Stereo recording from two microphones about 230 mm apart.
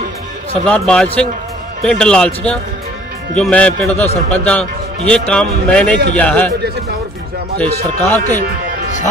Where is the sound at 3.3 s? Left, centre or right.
Centre.